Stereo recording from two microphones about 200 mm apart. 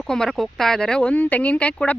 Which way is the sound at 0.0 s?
Centre (ahead or behind).